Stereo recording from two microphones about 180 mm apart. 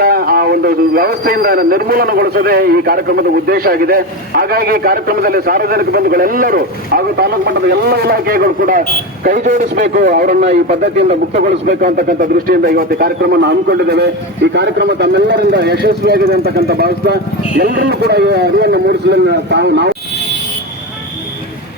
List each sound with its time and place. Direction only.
0.0 s a man's voice: 55° right (ahead or behind)